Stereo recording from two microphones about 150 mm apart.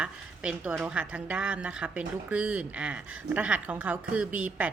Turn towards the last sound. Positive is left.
turn(degrees=-10)  # may be behind; listen again after turning